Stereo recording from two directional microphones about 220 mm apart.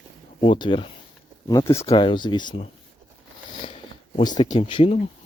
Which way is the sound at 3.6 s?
25° left (ahead or behind).